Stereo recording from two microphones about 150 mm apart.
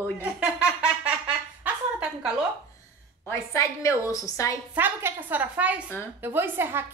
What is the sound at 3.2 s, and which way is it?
A woman's voice, 20° left (ahead or behind).